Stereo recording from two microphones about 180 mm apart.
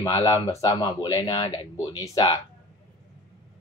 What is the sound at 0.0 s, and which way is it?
Speech, 20° left (ahead or behind).